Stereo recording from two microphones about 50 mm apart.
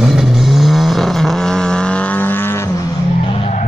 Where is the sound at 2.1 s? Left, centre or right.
Left.